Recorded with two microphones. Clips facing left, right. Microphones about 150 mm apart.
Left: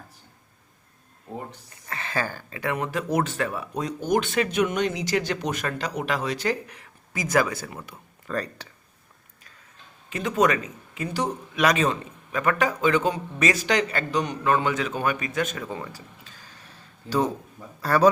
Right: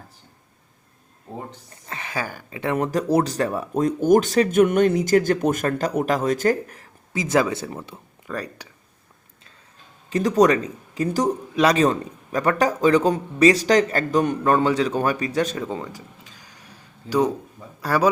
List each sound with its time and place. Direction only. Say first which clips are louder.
1.9 s speech: even; 15° right (ahead or behind)
2.7 s speech: right 6 dB; 40° right (ahead or behind)
7.1 s speech: right 3 dB; 30° right (ahead or behind)
8.3 s speech: left 1 dB; 10° right (ahead or behind)
10.1 s speech: right 5 dB; 35° right (ahead or behind)
15.6 s a sound: right 4 dB; 15° right (ahead or behind)
17.7 s speech: left 1 dB; 10° right (ahead or behind)